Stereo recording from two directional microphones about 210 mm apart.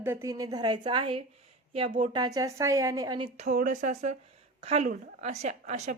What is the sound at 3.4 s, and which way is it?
A woman's voice, 40° right (ahead or behind).